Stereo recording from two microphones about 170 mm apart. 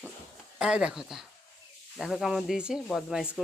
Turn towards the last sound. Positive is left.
turn(degrees=-5)  # may be behind; listen again after turning